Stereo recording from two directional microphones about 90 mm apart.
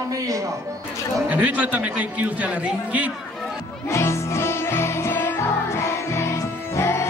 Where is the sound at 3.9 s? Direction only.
30° left (ahead or behind).